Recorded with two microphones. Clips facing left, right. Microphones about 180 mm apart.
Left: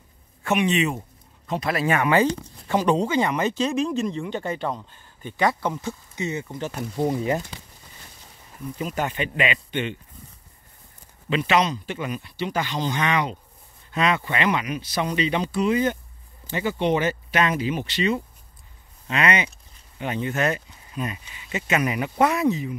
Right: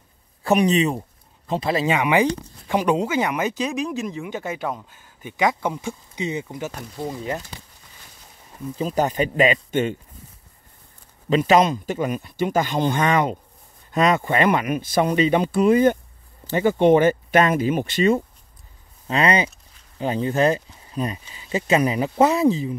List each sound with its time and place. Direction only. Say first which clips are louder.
0.4 s speech: right 4 dB; 35° right (ahead or behind); by 6.7 s 15° right (ahead or behind)
8.7 s speech: right 6 dB; 35° right (ahead or behind)
11.2 s a man's voice: right 5 dB; 40° right (ahead or behind)
19.0 s speech: right 3 dB; 35° right (ahead or behind)